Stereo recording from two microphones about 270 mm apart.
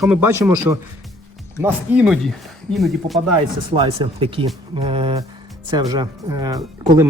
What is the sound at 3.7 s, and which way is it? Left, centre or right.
Speech, centre.